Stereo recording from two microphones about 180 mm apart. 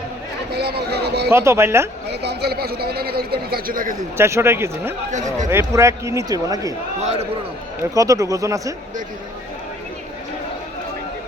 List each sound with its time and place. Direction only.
0.5 s speech: 65° right (ahead or behind)
1.3 s speech: 15° right (ahead or behind)
2.0 s speech: 65° right (ahead or behind)
4.2 s speech: 15° right (ahead or behind)
7.0 s a man's voice: 35° right (ahead or behind)
7.9 s speech: 20° right (ahead or behind)